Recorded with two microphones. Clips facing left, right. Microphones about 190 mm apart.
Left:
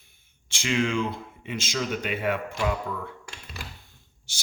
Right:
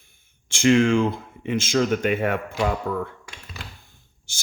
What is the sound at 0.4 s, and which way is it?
Speech, 50° right (ahead or behind).